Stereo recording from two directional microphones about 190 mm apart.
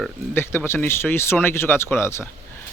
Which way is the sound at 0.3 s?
10° left (ahead or behind).